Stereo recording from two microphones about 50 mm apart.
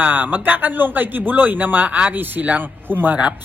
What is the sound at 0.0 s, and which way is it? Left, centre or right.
Speech, right.